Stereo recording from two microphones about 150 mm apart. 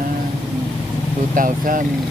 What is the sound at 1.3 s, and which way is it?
Speech, 65° right (ahead or behind).